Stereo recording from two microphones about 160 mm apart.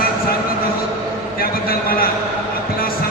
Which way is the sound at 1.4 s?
65° left (ahead or behind).